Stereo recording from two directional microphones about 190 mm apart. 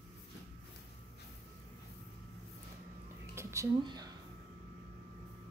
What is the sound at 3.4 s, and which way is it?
Music, 15° right (ahead or behind).